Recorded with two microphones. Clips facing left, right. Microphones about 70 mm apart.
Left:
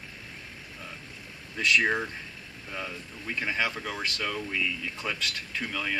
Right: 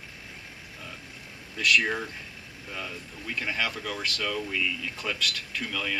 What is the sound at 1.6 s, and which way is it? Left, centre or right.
Speech, left.